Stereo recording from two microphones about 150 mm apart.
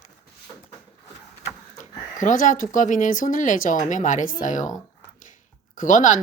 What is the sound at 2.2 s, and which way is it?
Speech, 60° left (ahead or behind).